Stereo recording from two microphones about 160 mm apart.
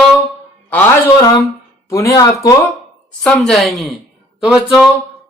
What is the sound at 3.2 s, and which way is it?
Speech, centre (ahead or behind).